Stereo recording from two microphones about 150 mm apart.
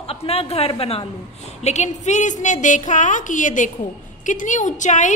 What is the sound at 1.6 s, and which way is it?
A woman's voice, 50° left (ahead or behind).